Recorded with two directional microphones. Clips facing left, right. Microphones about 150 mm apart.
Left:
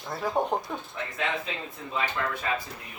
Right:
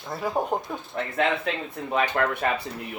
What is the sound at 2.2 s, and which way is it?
Speech, 60° right (ahead or behind).